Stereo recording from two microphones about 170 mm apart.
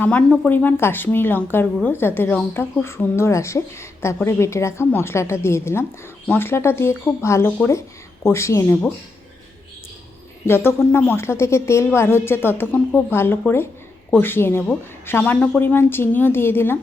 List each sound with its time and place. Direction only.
0.0 s a woman's voice: 10° left (ahead or behind)
10.4 s a woman's voice: 15° left (ahead or behind)